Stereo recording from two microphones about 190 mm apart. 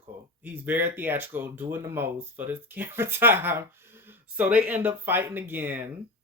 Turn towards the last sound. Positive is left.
turn(degrees=-10)  # may be behind; listen again after turning